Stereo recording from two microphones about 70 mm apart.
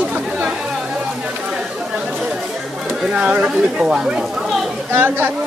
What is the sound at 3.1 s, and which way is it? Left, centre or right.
Speech, centre.